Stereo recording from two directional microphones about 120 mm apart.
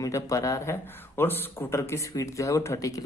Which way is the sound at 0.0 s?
25° left (ahead or behind).